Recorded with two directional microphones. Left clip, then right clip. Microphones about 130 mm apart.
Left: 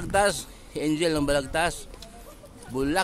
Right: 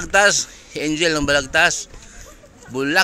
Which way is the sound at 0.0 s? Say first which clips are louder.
Right 8 dB; 5° right (ahead or behind).